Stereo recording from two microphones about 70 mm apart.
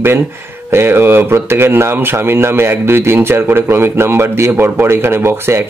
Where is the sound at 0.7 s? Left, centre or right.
Right.